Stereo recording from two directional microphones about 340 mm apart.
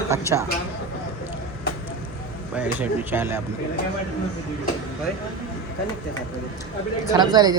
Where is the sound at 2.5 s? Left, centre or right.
Centre.